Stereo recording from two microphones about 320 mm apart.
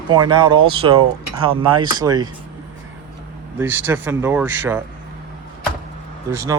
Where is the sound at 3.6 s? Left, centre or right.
Centre.